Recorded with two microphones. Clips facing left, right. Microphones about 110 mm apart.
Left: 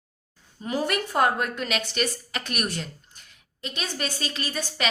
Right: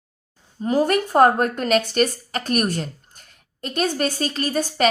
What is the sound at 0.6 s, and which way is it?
A woman's voice, 40° right (ahead or behind).